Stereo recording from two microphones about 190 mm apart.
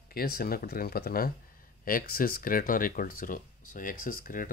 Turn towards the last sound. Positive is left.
turn(degrees=45)  # may be behind; listen again after turning